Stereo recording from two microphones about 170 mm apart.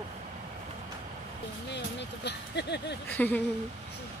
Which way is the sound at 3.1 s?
10° left (ahead or behind).